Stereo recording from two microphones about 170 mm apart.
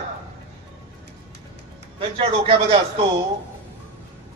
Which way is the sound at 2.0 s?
35° right (ahead or behind).